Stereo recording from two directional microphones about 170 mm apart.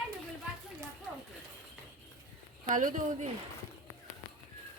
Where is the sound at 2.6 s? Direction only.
50° right (ahead or behind).